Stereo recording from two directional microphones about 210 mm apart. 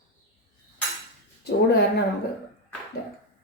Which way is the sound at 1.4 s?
50° left (ahead or behind).